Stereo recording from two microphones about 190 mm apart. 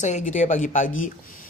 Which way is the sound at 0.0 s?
40° left (ahead or behind).